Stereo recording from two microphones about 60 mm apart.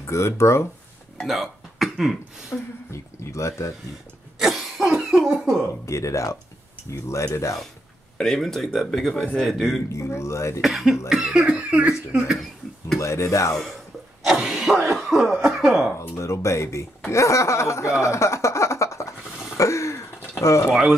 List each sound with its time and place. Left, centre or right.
0.0 s speech: left
1.2 s speech: centre
2.9 s speech: left
4.4 s cough: centre
5.1 s a sound: centre
5.9 s speech: left
8.2 s speech: centre
9.9 s speech: left
10.6 s speech: centre
13.0 s speech: left
14.2 s a sound: centre
15.0 s cough: centre
16.0 s speech: left
17.1 s a sound: left